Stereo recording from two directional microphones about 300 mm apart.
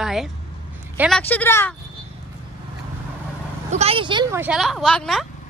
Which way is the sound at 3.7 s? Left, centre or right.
Centre.